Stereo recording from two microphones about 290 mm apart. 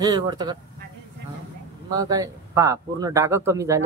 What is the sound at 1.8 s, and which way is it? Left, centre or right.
Speech, centre.